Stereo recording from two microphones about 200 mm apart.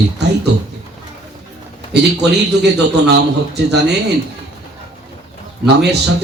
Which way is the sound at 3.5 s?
55° right (ahead or behind).